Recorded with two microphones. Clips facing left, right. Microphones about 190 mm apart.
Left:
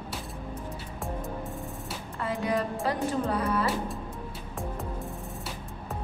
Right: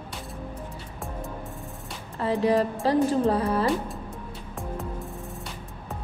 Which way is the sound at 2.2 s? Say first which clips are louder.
Right 6 dB; 35° right (ahead or behind).